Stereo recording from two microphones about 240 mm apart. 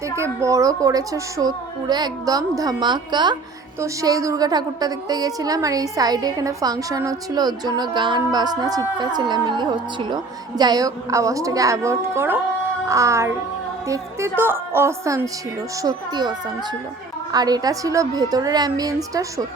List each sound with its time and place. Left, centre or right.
0.2 s a woman's voice: centre
17.3 s a woman's voice: centre